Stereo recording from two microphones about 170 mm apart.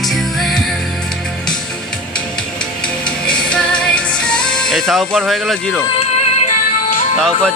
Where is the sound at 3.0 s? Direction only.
5° left (ahead or behind).